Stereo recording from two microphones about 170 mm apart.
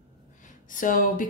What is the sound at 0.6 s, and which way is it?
Speech, 50° left (ahead or behind).